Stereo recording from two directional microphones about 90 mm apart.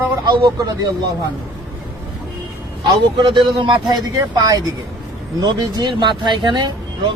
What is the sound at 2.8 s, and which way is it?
A man's voice, 60° right (ahead or behind).